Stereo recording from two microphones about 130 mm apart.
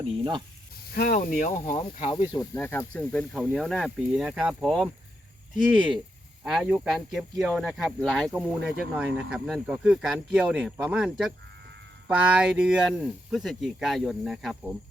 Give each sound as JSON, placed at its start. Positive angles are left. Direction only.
{"t": 0.0, "sound": "speech", "side_deg": -35}
{"t": 1.0, "sound": "speech", "side_deg": 90}
{"t": 2.0, "sound": "speech", "side_deg": 35}
{"t": 2.6, "sound": "speech", "side_deg": 15}
{"t": 6.4, "sound": "speech", "side_deg": -5}